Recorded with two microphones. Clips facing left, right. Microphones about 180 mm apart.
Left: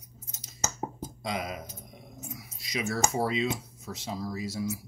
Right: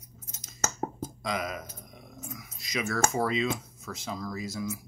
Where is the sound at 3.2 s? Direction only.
25° left (ahead or behind).